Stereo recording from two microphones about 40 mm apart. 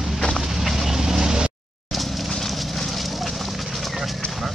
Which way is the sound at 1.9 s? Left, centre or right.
Centre.